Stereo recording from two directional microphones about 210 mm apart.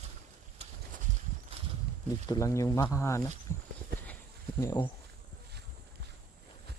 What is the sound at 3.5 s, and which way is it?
Horse, 15° left (ahead or behind).